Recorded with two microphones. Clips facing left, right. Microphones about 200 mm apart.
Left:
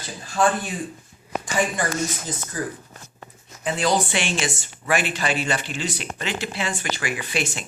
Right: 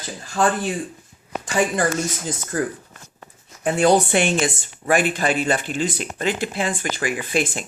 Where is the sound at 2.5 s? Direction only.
55° right (ahead or behind).